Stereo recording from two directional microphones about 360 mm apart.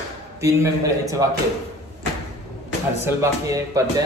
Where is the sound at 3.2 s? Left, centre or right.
Centre.